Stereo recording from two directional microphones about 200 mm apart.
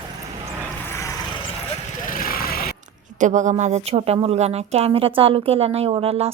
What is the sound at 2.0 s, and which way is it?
Vehicle, 45° left (ahead or behind).